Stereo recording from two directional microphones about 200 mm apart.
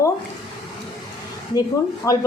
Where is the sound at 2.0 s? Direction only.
15° left (ahead or behind).